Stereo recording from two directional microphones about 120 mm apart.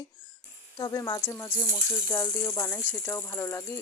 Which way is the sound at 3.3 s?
20° left (ahead or behind).